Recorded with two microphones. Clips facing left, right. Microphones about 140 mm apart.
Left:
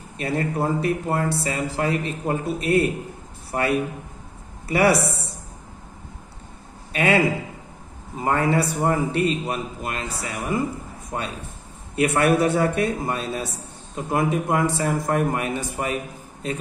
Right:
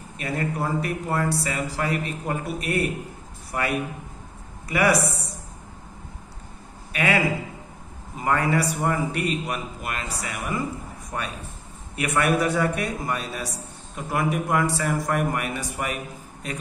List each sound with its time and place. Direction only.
0.2 s speech: 30° left (ahead or behind)
6.9 s speech: 30° left (ahead or behind)